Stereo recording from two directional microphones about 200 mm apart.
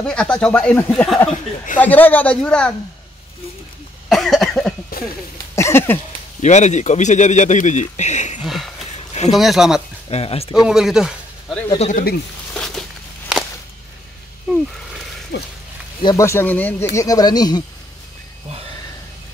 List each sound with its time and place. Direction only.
0.0 s a woman's voice: 5° left (ahead or behind)
4.1 s cough: centre (ahead or behind)
5.6 s a woman's voice: 10° left (ahead or behind)
6.4 s a man's voice: 35° left (ahead or behind)
8.5 s a sound: centre (ahead or behind)
9.3 s speech: centre (ahead or behind)
10.0 s speech: 30° left (ahead or behind)
10.7 s speech: centre (ahead or behind)
11.9 s speech: 50° left (ahead or behind)
12.5 s a sound: centre (ahead or behind)
15.3 s speech: 60° left (ahead or behind)
16.0 s a woman's voice: 20° left (ahead or behind)